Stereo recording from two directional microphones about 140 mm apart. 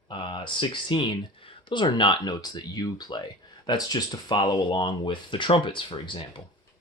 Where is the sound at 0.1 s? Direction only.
35° left (ahead or behind).